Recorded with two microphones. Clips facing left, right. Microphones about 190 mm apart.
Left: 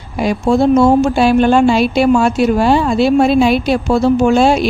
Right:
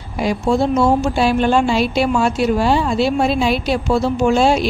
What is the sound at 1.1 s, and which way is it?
A woman's voice, 55° left (ahead or behind).